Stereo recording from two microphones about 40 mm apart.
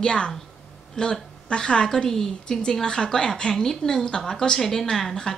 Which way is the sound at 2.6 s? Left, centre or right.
Centre.